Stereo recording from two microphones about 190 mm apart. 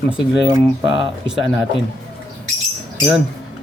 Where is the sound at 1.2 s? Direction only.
5° right (ahead or behind).